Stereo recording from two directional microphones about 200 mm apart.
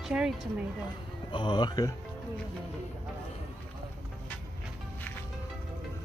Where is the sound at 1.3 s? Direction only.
20° left (ahead or behind).